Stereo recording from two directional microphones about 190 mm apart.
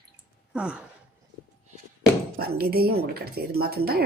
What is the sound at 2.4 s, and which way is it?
Speech, 55° right (ahead or behind).